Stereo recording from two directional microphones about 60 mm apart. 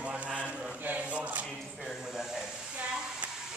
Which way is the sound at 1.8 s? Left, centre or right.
Centre.